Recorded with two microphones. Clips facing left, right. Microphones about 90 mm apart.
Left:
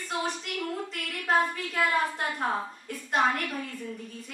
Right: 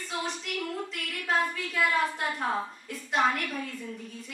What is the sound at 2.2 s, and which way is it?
Speech, centre (ahead or behind).